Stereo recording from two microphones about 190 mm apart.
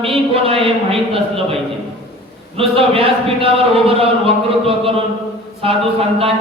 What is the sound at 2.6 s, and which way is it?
A man's voice, 30° right (ahead or behind).